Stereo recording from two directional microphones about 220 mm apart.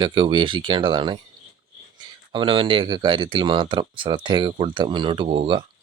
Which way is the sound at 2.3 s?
25° right (ahead or behind).